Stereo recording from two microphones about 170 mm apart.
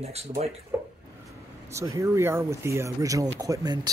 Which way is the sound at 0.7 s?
15° right (ahead or behind).